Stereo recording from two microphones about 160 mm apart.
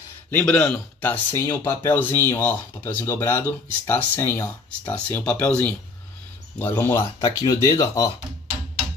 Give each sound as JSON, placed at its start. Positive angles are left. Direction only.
{"t": 0.3, "sound": "speech", "side_deg": 10}